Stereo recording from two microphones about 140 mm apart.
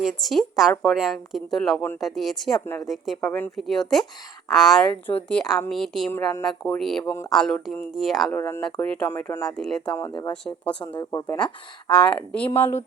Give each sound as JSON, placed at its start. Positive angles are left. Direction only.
{"t": 0.0, "sound": "speech", "side_deg": 0}
{"t": 3.2, "sound": "speech", "side_deg": 15}
{"t": 3.6, "sound": "speech", "side_deg": 5}
{"t": 6.1, "sound": "speech", "side_deg": 15}
{"t": 6.4, "sound": "speech", "side_deg": 5}
{"t": 7.0, "sound": "speech", "side_deg": 20}
{"t": 7.3, "sound": "speech", "side_deg": 5}
{"t": 8.3, "sound": "speech", "side_deg": 15}
{"t": 9.2, "sound": "speech", "side_deg": 20}
{"t": 9.6, "sound": "speech", "side_deg": 5}